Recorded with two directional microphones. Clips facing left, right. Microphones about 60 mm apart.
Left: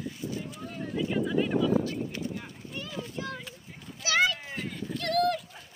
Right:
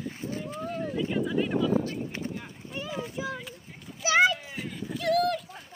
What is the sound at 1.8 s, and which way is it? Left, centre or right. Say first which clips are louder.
Clip-clop: even; right.